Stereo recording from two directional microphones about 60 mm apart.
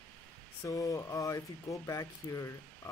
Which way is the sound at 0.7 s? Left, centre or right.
Left.